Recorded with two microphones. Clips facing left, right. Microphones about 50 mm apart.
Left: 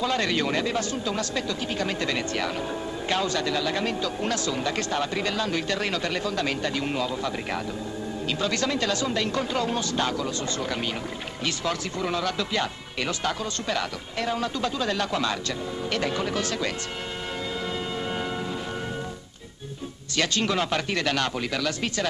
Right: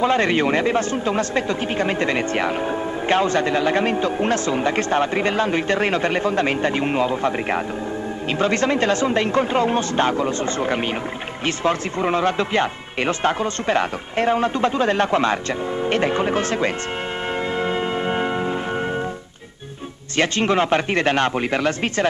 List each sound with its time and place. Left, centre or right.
0.0 s speech: right
17.6 s music: right
20.2 s speech: right